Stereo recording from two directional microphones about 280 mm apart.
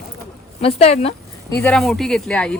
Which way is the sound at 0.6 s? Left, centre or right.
Left.